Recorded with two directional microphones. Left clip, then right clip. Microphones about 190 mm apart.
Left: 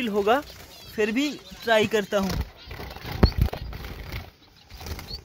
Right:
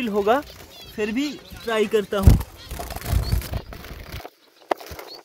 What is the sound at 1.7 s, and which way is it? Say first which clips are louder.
Speech: even; 30° left (ahead or behind).